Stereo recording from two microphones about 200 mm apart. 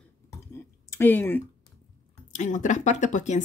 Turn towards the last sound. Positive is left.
turn(degrees=35)  # may be behind; listen again after turning